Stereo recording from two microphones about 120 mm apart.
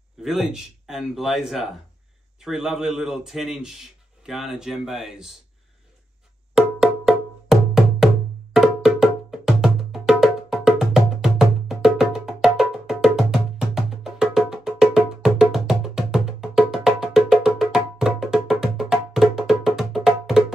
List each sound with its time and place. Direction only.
0.2 s a man's voice: 5° right (ahead or behind)
6.5 s music: 5° right (ahead or behind)
8.5 s wood block: 5° right (ahead or behind)